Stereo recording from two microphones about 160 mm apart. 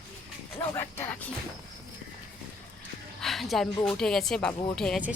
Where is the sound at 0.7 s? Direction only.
15° left (ahead or behind).